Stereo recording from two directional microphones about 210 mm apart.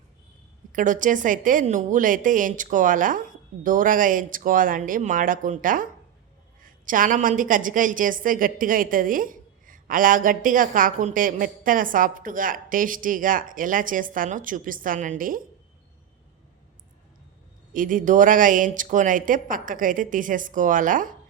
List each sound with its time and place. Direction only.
0.7 s a woman's voice: 40° right (ahead or behind)
17.7 s a woman's voice: 40° right (ahead or behind)